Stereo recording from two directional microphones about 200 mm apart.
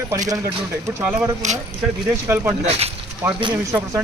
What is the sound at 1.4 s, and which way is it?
Speech, 35° right (ahead or behind).